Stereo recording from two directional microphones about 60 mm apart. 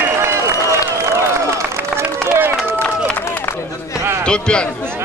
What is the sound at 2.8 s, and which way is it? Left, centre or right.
Run, left.